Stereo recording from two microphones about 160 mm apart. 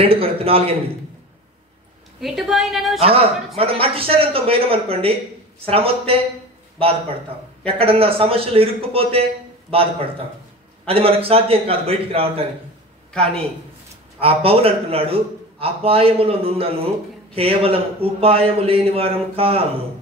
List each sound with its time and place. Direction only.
0.0 s a man's voice: 35° right (ahead or behind)
2.2 s a woman's voice: centre (ahead or behind)
3.0 s a man's voice: 35° right (ahead or behind)
10.9 s a man's voice: 35° right (ahead or behind)
13.1 s a woman's voice: 5° left (ahead or behind)
14.2 s a man's voice: 35° right (ahead or behind)